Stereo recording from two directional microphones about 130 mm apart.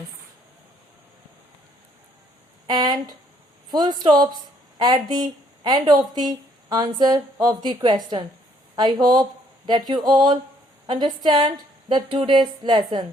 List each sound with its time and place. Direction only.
2.6 s speech: 35° right (ahead or behind)